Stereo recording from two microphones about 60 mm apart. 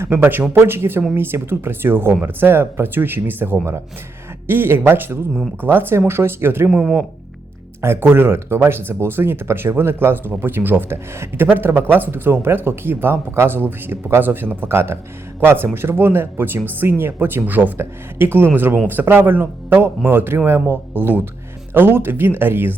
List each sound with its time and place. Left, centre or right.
0.0 s speech: right
7.8 s speech: right